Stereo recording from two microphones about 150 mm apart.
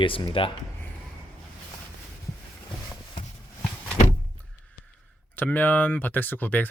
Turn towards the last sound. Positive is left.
turn(degrees=10)  # may be behind; listen again after turning